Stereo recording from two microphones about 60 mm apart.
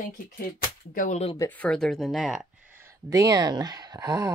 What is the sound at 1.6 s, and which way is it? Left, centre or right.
Speech, centre.